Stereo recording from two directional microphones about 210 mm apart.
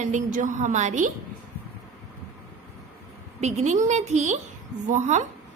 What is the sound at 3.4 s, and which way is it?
A woman's voice, 30° right (ahead or behind).